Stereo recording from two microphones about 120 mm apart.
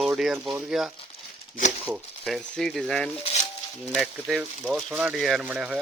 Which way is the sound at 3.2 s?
65° left (ahead or behind).